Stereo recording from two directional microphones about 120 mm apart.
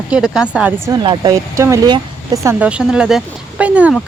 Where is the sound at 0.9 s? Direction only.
40° right (ahead or behind).